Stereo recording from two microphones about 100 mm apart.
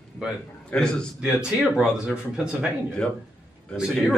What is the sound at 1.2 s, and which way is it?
Speech, 5° right (ahead or behind).